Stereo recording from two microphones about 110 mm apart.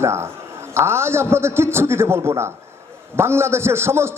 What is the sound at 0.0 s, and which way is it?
A man's voice, 25° right (ahead or behind).